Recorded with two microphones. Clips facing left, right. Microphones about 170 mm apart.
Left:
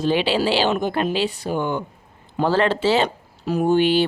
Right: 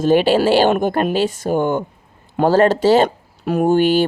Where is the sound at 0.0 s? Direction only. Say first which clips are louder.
Right 6 dB; 45° right (ahead or behind).